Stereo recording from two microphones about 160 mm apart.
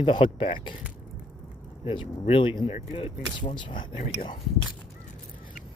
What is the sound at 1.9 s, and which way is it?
Speech, 35° left (ahead or behind).